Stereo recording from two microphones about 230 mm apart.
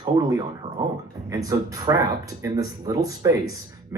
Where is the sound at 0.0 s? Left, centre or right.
Centre.